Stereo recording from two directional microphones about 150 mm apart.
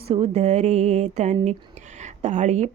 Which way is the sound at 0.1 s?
45° right (ahead or behind).